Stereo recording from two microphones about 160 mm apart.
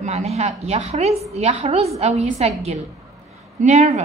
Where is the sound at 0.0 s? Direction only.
40° right (ahead or behind).